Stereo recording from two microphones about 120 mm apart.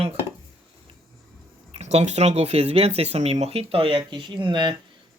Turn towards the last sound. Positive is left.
turn(degrees=-40)  # may be behind; listen again after turning